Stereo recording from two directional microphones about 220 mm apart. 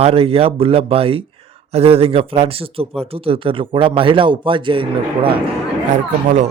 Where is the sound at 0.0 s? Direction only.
25° right (ahead or behind).